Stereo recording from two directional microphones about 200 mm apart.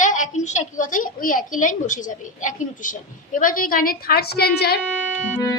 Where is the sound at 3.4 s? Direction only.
45° left (ahead or behind).